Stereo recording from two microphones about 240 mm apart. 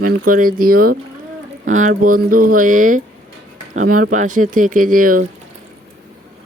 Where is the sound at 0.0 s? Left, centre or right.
Right.